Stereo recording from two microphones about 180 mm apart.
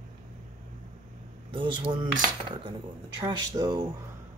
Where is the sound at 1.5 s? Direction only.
25° right (ahead or behind).